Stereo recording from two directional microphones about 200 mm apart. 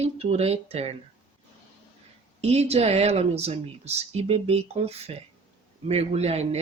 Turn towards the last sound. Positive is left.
turn(degrees=-30)  # may be behind; listen again after turning